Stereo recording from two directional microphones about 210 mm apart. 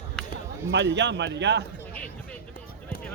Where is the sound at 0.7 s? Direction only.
55° right (ahead or behind).